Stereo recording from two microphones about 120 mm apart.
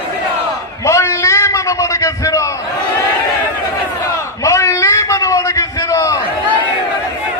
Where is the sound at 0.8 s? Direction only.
25° left (ahead or behind).